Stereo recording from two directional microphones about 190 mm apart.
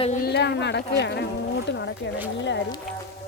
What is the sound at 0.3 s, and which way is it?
Speech, 65° left (ahead or behind).